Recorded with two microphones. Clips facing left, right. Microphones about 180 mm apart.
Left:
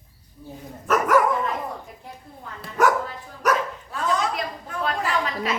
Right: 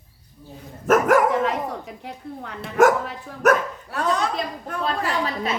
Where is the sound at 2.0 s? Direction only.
75° right (ahead or behind).